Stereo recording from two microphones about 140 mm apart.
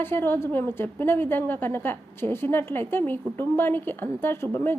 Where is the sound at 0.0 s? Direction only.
15° left (ahead or behind).